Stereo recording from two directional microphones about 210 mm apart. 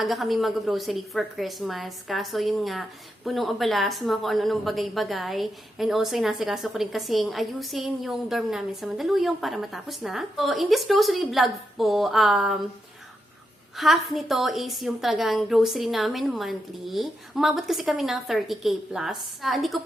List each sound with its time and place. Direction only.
0.0 s a woman's voice: centre (ahead or behind)
13.7 s a woman's voice: centre (ahead or behind)